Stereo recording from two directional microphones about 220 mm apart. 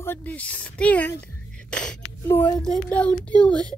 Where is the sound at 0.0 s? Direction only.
10° left (ahead or behind).